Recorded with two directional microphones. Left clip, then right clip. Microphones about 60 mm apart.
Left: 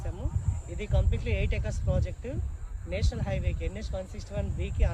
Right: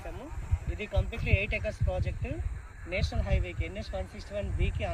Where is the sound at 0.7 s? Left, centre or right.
Left.